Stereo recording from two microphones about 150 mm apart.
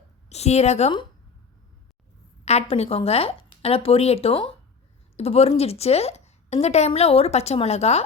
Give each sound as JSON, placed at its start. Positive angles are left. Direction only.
{"t": 0.3, "sound": "a woman's voice", "side_deg": 45}
{"t": 2.4, "sound": "a woman's voice", "side_deg": 45}